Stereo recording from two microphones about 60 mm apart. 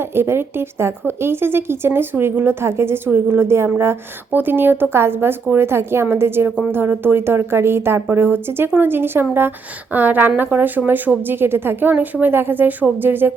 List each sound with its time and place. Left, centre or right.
0.0 s a woman's voice: right
9.9 s a woman's voice: right